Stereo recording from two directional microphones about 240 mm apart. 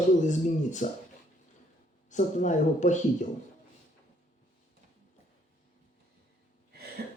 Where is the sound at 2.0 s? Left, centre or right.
Left.